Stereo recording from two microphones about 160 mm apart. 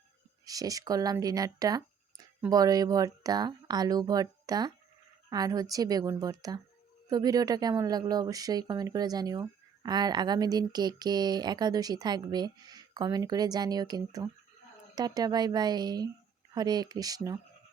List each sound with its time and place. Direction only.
0.4 s speech: 20° right (ahead or behind)